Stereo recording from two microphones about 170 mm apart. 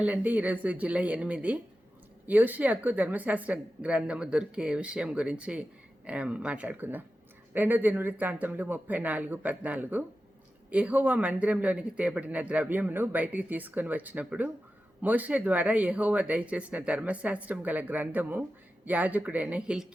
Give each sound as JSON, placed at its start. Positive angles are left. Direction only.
{"t": 0.0, "sound": "speech", "side_deg": -10}